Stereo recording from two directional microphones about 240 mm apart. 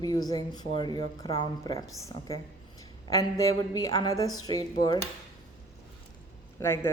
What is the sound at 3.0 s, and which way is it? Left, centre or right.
Speech, centre.